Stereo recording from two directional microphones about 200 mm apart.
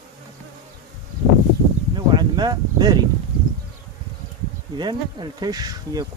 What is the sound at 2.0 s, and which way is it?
Speech, 20° right (ahead or behind).